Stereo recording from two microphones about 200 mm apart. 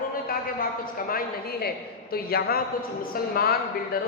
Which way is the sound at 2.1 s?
50° left (ahead or behind).